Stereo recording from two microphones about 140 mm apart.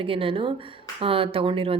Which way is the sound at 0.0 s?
40° right (ahead or behind).